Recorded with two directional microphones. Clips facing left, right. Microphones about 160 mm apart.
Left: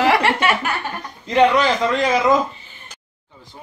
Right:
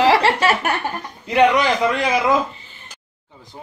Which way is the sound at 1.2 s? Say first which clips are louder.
Even; 10° right (ahead or behind).